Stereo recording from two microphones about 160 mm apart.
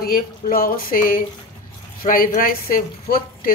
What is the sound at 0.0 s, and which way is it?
A woman's voice, 65° left (ahead or behind).